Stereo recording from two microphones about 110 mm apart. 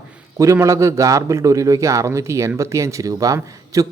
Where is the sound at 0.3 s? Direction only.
30° right (ahead or behind).